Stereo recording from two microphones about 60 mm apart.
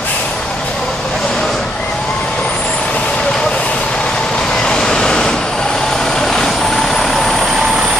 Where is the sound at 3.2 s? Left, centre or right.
Centre.